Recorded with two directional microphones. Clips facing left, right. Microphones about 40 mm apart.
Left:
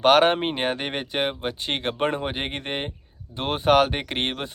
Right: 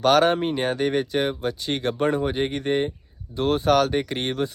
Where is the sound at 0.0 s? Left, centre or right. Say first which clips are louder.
Left 1 dB; left.